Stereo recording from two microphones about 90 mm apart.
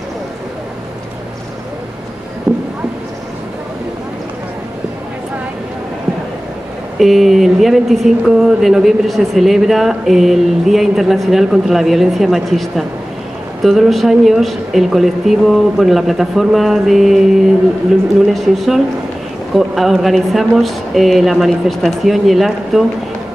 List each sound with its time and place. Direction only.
7.0 s speech: centre (ahead or behind)
18.2 s speech: 5° right (ahead or behind)